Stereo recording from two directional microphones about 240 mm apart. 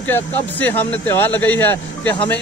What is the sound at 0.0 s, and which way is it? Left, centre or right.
Speech, centre.